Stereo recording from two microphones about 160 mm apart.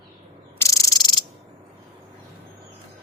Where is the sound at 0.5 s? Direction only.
20° left (ahead or behind).